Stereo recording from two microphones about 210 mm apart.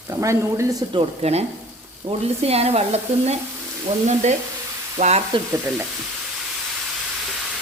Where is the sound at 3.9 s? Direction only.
30° right (ahead or behind).